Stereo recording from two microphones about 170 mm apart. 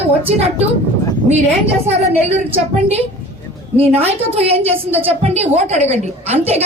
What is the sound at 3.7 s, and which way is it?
A woman's voice, 35° right (ahead or behind).